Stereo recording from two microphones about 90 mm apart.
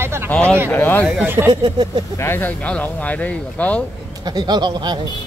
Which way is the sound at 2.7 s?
15° left (ahead or behind).